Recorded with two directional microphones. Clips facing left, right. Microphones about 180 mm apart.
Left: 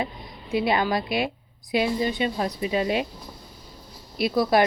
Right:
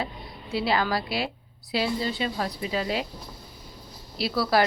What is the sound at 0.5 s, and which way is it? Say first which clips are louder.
Speech: left 3 dB; 20° left (ahead or behind).